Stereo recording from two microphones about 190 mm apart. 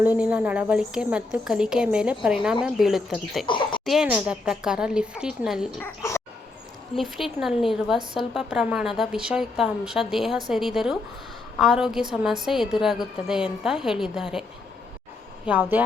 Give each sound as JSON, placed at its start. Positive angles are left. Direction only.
{"t": 0.0, "sound": "a woman's voice", "side_deg": -10}
{"t": 3.4, "sound": "speech", "side_deg": 25}
{"t": 3.8, "sound": "a woman's voice", "side_deg": -5}
{"t": 5.8, "sound": "speech", "side_deg": 15}
{"t": 6.9, "sound": "a woman's voice", "side_deg": 0}
{"t": 15.4, "sound": "a woman's voice", "side_deg": -10}